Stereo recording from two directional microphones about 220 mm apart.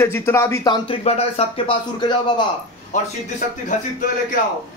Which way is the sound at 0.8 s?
30° left (ahead or behind).